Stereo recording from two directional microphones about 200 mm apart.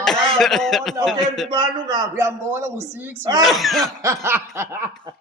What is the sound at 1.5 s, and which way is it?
A man's voice, 20° right (ahead or behind).